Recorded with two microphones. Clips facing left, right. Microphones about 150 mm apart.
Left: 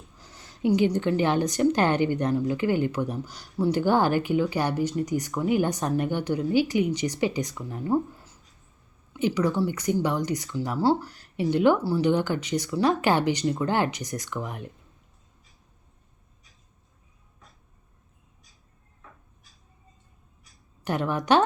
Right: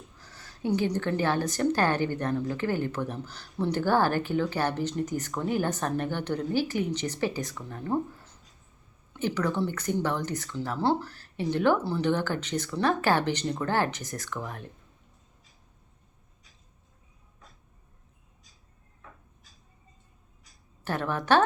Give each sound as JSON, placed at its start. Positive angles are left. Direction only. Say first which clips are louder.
{"t": 0.2, "sound": "a woman's voice", "louder": "left 6 dB", "side_deg": 20}
{"t": 20.8, "sound": "a woman's voice", "louder": "left 3 dB", "side_deg": 15}